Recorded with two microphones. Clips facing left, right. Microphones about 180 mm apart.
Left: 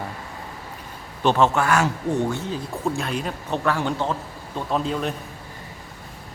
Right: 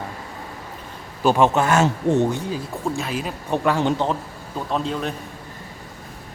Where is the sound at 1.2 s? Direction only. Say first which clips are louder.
Right 2 dB; 10° right (ahead or behind).